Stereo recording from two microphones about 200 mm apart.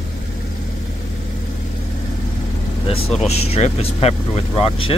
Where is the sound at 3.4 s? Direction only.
30° left (ahead or behind).